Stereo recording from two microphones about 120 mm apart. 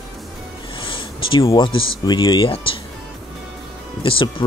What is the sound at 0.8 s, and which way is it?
Speech, 45° left (ahead or behind).